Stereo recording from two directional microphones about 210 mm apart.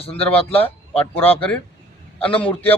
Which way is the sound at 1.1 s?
10° left (ahead or behind).